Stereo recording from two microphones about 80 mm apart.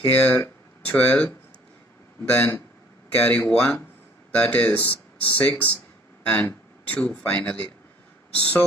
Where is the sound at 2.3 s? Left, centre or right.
Left.